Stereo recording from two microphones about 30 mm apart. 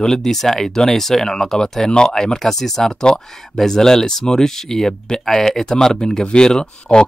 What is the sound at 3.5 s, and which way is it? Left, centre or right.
Speech, centre.